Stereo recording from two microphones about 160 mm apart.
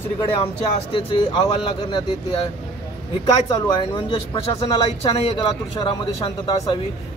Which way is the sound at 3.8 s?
35° left (ahead or behind).